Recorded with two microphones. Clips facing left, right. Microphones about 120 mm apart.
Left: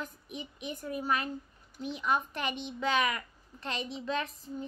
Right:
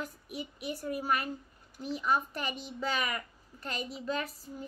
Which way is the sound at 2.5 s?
40° right (ahead or behind).